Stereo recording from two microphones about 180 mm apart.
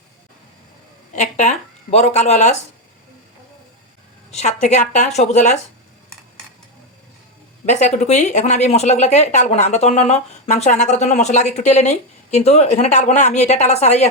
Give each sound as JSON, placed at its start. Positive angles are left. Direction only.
{"t": 1.1, "sound": "speech", "side_deg": 40}
{"t": 4.3, "sound": "speech", "side_deg": 40}
{"t": 7.6, "sound": "speech", "side_deg": 40}